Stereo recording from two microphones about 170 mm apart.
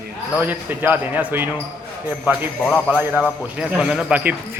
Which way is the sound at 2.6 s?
10° left (ahead or behind).